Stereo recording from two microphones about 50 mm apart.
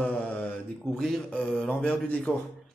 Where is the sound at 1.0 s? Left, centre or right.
Centre.